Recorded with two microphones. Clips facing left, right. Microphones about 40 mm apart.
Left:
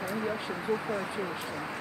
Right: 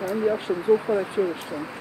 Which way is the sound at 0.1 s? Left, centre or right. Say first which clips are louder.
Right 11 dB; centre.